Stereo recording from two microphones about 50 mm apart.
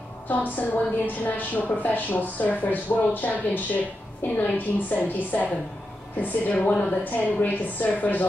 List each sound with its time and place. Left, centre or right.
0.3 s speech: left
6.6 s a woman's voice: centre
7.1 s speech: left